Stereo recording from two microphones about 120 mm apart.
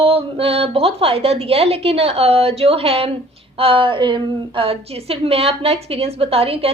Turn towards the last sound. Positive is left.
turn(degrees=-55)  # may be behind; listen again after turning